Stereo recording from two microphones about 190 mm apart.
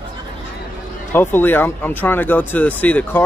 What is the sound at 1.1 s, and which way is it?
Speech, 10° left (ahead or behind).